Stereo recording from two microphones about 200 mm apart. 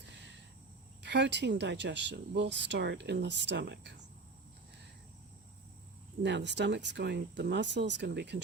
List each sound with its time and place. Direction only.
1.0 s speech: 60° right (ahead or behind)
6.2 s speech: 60° right (ahead or behind)